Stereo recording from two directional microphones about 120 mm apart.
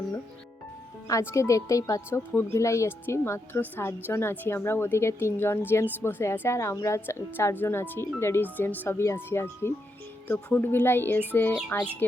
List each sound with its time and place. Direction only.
1.0 s a woman's voice: 25° left (ahead or behind)